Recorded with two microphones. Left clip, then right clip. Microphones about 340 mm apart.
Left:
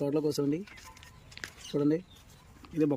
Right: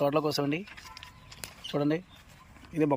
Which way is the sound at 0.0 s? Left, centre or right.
Centre.